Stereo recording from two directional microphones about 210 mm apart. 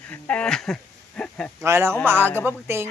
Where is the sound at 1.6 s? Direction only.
10° right (ahead or behind).